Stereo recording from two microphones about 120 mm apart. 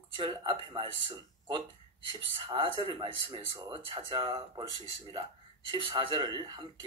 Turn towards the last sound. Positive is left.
turn(degrees=-40)  # may be behind; listen again after turning